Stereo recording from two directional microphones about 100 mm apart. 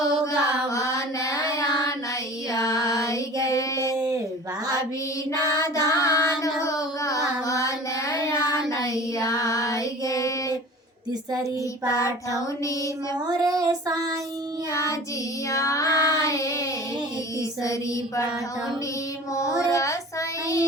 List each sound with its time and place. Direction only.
0.3 s child singing: 35° left (ahead or behind)
2.5 s music: 35° left (ahead or behind)
3.4 s child singing: 30° left (ahead or behind)
3.9 s a sound: 40° right (ahead or behind)
5.5 s child singing: 30° left (ahead or behind)
11.9 s child singing: 30° left (ahead or behind)
13.1 s child singing: 40° right (ahead or behind)
15.4 s child singing: 30° left (ahead or behind)
19.3 s child singing: 30° left (ahead or behind)